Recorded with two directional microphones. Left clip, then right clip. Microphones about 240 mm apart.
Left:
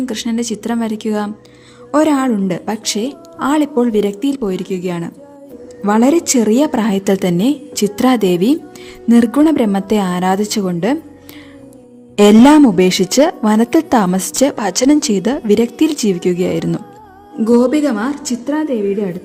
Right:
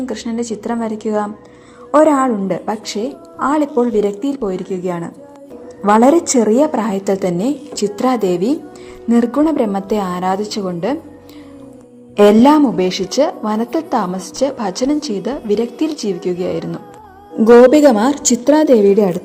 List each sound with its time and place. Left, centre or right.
0.0 s a woman's voice: left
1.9 s a woman's voice: left
4.9 s a woman's voice: left
12.1 s a woman's voice: left
17.3 s a woman's voice: centre